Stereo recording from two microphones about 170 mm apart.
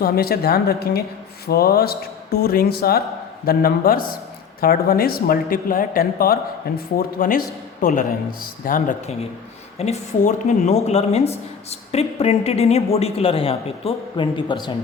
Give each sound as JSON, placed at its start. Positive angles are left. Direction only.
{"t": 0.0, "sound": "a woman's voice", "side_deg": 65}
{"t": 9.7, "sound": "speech", "side_deg": 40}